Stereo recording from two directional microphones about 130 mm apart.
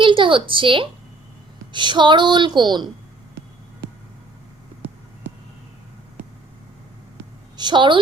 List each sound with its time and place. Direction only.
0.0 s a woman's voice: 40° right (ahead or behind)
7.5 s a woman's voice: 35° right (ahead or behind)